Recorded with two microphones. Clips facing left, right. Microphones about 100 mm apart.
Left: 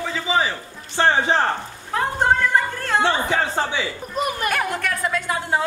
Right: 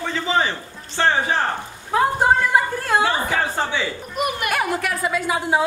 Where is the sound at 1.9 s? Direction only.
10° right (ahead or behind).